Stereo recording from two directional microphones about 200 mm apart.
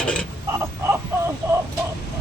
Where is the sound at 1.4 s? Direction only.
15° right (ahead or behind).